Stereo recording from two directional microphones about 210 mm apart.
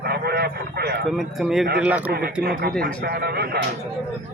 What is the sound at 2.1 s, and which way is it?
A man's voice, 50° right (ahead or behind).